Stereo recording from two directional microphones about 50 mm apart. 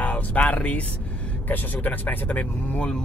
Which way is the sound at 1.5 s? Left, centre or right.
Left.